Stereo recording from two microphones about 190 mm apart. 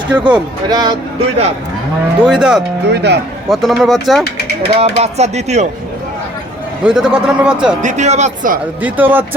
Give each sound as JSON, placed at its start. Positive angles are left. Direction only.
{"t": 0.1, "sound": "speech", "side_deg": -5}
{"t": 0.7, "sound": "speech", "side_deg": -20}
{"t": 2.1, "sound": "a man's voice", "side_deg": -5}
{"t": 2.8, "sound": "speech", "side_deg": -65}
{"t": 3.5, "sound": "a man's voice", "side_deg": 0}
{"t": 4.8, "sound": "speech", "side_deg": -35}
{"t": 6.8, "sound": "a man's voice", "side_deg": -5}
{"t": 7.8, "sound": "speech", "side_deg": -40}
{"t": 8.8, "sound": "speech", "side_deg": -10}